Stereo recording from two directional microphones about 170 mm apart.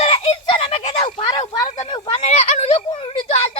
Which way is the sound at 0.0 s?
35° left (ahead or behind).